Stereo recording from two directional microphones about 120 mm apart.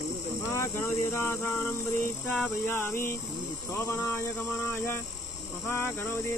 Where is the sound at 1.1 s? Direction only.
20° left (ahead or behind).